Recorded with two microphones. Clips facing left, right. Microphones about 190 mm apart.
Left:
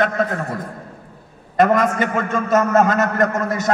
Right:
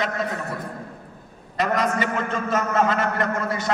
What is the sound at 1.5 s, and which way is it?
A man's voice, 50° left (ahead or behind).